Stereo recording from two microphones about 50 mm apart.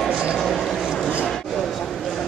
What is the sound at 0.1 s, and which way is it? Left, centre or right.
Vehicle, centre.